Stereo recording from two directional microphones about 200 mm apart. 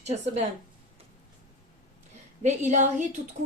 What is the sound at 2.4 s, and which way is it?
Speech, 35° right (ahead or behind).